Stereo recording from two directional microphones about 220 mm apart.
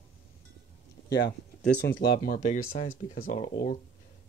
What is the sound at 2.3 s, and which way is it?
Speech, 35° left (ahead or behind).